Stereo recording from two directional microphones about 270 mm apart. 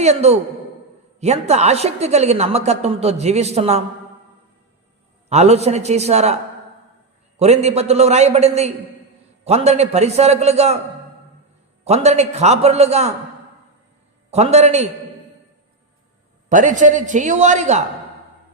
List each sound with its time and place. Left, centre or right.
0.0 s a woman's voice: right
5.3 s a woman's voice: right
7.3 s a woman's voice: right
11.9 s a woman's voice: right
14.3 s a woman's voice: right
16.5 s a woman's voice: right